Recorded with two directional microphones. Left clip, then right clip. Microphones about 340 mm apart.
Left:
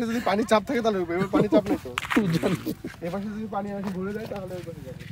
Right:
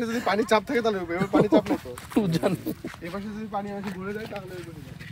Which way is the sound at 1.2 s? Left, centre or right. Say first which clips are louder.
Right 2 dB; centre.